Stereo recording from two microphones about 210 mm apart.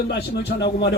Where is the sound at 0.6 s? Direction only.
55° left (ahead or behind).